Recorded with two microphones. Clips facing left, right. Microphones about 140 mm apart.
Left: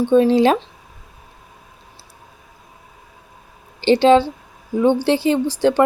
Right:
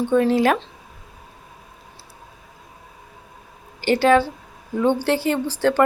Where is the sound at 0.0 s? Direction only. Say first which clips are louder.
Left 4 dB; 25° left (ahead or behind).